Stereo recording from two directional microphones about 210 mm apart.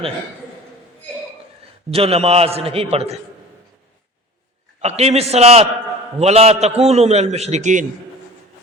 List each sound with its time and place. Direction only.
1.9 s a man's voice: 30° right (ahead or behind)
4.8 s a man's voice: 30° right (ahead or behind)